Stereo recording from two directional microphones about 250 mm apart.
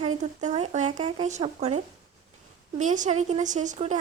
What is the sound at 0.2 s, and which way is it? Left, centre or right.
Speech, right.